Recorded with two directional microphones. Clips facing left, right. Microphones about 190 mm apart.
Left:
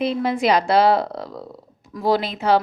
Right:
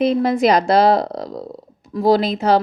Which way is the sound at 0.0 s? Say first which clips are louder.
Right 5 dB; 40° right (ahead or behind).